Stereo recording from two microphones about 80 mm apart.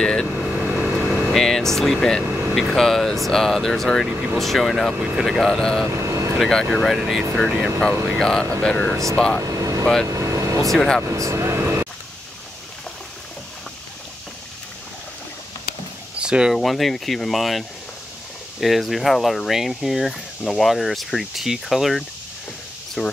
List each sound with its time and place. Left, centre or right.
0.0 s speech: centre
0.4 s vehicle: centre
1.3 s speech: centre
4.1 s speech: right
4.4 s speech: centre
6.0 s vehicle: right
6.3 s speech: centre
9.4 s vehicle: right
10.7 s speech: centre
11.1 s speech: right
16.2 s a sound: centre
16.5 s speech: centre